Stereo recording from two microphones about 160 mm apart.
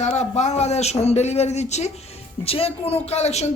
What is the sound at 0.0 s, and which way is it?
Speech, 45° left (ahead or behind).